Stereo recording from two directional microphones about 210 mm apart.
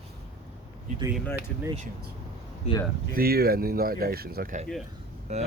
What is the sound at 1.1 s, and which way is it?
Speech, 5° left (ahead or behind).